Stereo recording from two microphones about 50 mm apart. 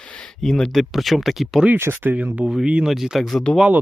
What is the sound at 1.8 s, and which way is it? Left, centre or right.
Speech, right.